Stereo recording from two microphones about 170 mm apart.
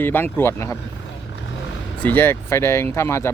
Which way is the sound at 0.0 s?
10° left (ahead or behind).